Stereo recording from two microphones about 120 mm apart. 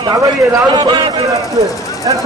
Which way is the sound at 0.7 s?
40° right (ahead or behind).